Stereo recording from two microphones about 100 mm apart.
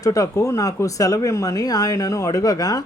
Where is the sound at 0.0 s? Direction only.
35° left (ahead or behind).